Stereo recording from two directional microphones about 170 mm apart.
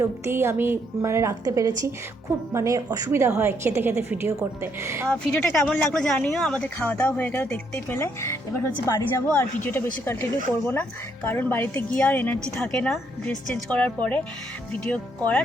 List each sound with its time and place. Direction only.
0.0 s a woman's voice: 15° right (ahead or behind)
5.0 s speech: 5° left (ahead or behind)